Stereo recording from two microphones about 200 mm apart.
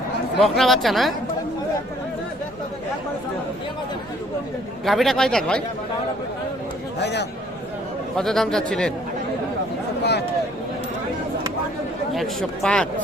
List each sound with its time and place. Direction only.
0.3 s a man's voice: centre (ahead or behind)
4.9 s a man's voice: centre (ahead or behind)
7.0 s a man's voice: 60° left (ahead or behind)
8.1 s a man's voice: centre (ahead or behind)
10.0 s a sound: 55° left (ahead or behind)
12.1 s speech: centre (ahead or behind)